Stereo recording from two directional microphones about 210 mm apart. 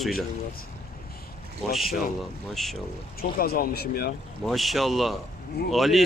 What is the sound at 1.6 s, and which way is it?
Speech, centre (ahead or behind).